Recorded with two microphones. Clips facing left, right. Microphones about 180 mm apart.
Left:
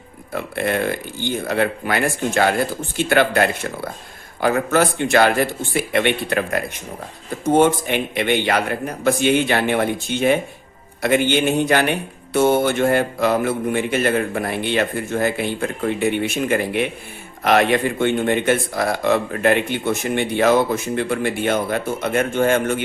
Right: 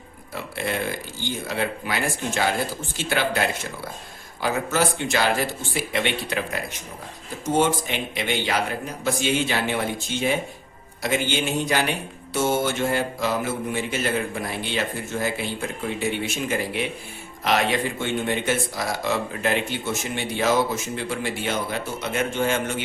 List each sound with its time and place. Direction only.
0.3 s speech: 55° left (ahead or behind)